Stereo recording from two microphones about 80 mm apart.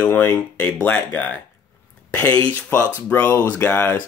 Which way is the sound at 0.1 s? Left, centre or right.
Left.